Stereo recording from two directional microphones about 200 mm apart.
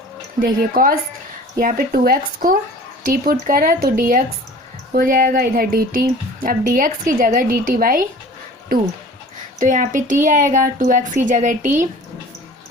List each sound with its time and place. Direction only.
0.3 s speech: 45° right (ahead or behind)
9.6 s speech: 40° right (ahead or behind)